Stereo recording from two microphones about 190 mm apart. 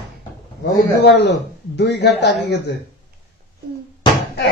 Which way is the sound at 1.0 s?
65° left (ahead or behind).